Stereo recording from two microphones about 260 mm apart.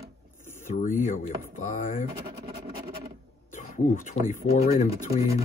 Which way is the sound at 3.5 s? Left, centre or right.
Left.